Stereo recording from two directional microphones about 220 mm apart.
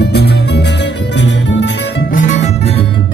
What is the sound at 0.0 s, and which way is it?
Music, 50° left (ahead or behind).